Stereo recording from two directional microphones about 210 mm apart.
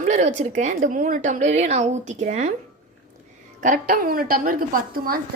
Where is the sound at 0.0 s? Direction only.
35° right (ahead or behind).